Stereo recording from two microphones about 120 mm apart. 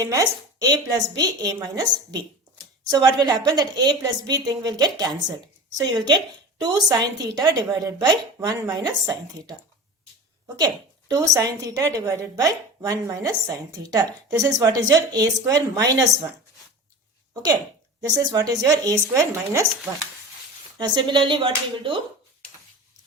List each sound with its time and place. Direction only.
0.0 s a woman's voice: 30° right (ahead or behind)
11.1 s a woman's voice: 30° right (ahead or behind)
18.2 s a woman's voice: 30° right (ahead or behind)
19.9 s speech: 15° right (ahead or behind)
20.7 s a woman's voice: 35° right (ahead or behind)